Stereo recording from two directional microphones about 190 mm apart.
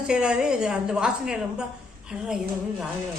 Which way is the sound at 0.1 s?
5° right (ahead or behind).